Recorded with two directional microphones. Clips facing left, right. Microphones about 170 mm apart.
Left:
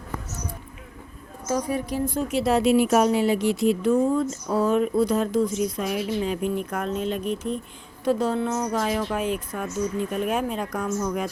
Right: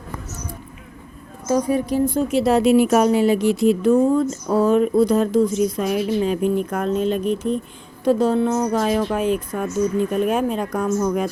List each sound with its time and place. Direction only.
1.5 s a woman's voice: 30° right (ahead or behind)